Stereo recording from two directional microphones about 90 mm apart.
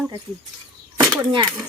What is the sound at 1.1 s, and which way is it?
Speech, 50° right (ahead or behind).